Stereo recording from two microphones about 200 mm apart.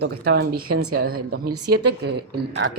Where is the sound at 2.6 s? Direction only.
75° right (ahead or behind).